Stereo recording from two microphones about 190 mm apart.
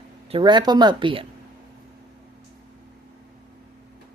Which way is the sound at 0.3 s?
25° right (ahead or behind).